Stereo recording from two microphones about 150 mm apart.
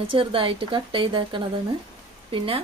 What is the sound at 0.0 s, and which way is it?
Speech, 35° right (ahead or behind).